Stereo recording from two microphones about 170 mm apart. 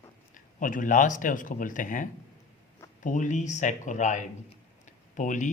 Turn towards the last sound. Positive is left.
turn(degrees=45)  # may be behind; listen again after turning